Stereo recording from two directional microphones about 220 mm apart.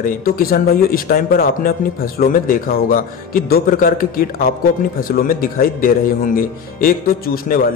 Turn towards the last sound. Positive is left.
turn(degrees=40)  # may be behind; listen again after turning